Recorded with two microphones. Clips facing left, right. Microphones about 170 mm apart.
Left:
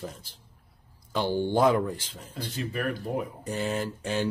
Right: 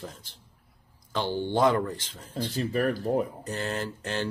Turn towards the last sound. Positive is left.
turn(degrees=10)  # may be behind; listen again after turning